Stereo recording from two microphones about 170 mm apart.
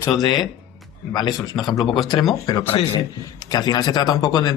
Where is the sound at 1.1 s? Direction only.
25° left (ahead or behind).